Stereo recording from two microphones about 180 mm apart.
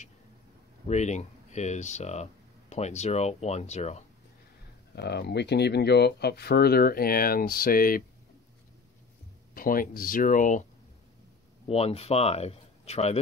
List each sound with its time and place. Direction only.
0.8 s speech: 40° left (ahead or behind)
4.9 s speech: 65° left (ahead or behind)
9.5 s speech: 50° left (ahead or behind)
11.6 s speech: 35° left (ahead or behind)